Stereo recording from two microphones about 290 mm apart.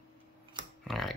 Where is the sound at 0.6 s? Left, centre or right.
Centre.